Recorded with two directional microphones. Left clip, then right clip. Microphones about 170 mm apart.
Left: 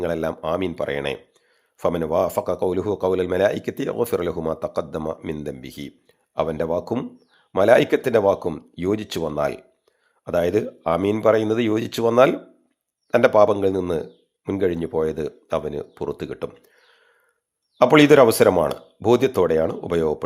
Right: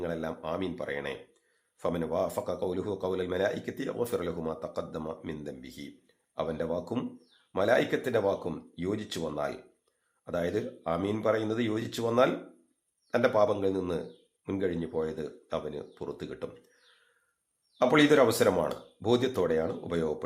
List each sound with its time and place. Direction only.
0.0 s speech: 45° left (ahead or behind)
17.7 s speech: 40° left (ahead or behind)